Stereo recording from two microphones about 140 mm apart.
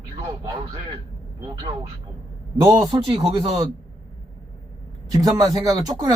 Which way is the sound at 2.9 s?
35° right (ahead or behind).